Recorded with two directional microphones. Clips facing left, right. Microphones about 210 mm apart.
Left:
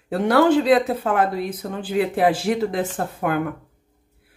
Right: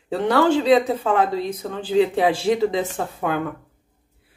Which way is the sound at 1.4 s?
5° left (ahead or behind).